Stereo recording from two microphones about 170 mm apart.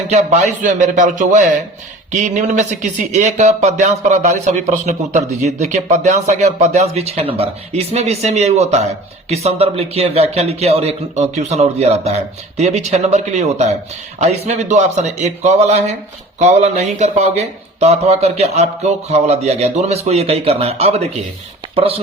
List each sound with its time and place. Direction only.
0.1 s speech: 40° right (ahead or behind)